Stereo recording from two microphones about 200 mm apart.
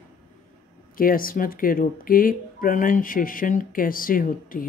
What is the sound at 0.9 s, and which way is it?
Speech, 45° left (ahead or behind).